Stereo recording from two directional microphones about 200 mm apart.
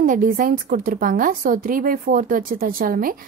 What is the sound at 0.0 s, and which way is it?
A woman's voice, 40° right (ahead or behind).